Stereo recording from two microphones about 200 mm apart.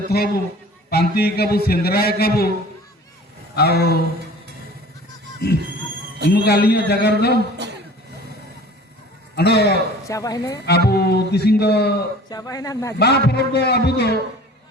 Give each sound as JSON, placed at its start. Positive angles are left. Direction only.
{"t": 0.1, "sound": "a man's voice", "side_deg": 55}
{"t": 3.5, "sound": "a man's voice", "side_deg": 55}
{"t": 5.4, "sound": "a man's voice", "side_deg": 50}
{"t": 9.3, "sound": "a man's voice", "side_deg": 55}
{"t": 10.1, "sound": "a man's voice", "side_deg": 15}
{"t": 10.7, "sound": "a man's voice", "side_deg": 55}
{"t": 12.3, "sound": "a man's voice", "side_deg": 20}
{"t": 13.0, "sound": "a man's voice", "side_deg": 55}